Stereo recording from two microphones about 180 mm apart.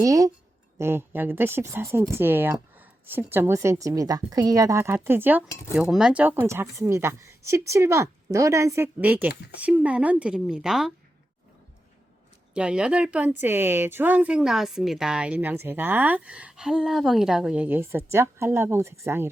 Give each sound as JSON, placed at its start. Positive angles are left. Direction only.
{"t": 0.0, "sound": "a woman's voice", "side_deg": -20}
{"t": 12.5, "sound": "a woman's voice", "side_deg": -5}